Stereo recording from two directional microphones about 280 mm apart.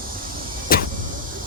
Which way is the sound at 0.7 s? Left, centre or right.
Left.